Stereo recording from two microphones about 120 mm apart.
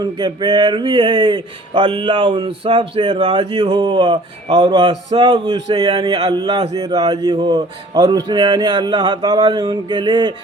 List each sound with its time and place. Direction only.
0.0 s speech: 40° right (ahead or behind)
6.7 s speech: 30° right (ahead or behind)